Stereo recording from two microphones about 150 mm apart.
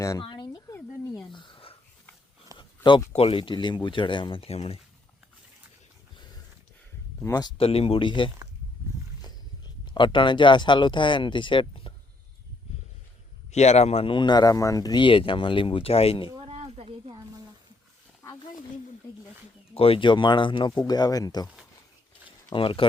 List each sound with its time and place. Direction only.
0.0 s a sound: 25° left (ahead or behind)
3.1 s speech: 40° left (ahead or behind)
7.2 s speech: 20° left (ahead or behind)
7.6 s speech: 40° left (ahead or behind)
9.8 s speech: 30° left (ahead or behind)
13.5 s speech: 45° left (ahead or behind)
16.3 s a sound: 40° right (ahead or behind)
19.7 s speech: 40° left (ahead or behind)
22.5 s speech: 35° left (ahead or behind)